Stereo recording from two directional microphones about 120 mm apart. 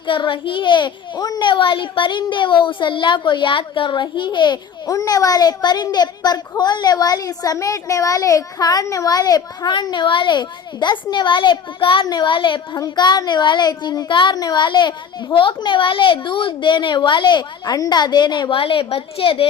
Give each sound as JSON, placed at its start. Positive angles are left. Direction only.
{"t": 0.1, "sound": "speech", "side_deg": 45}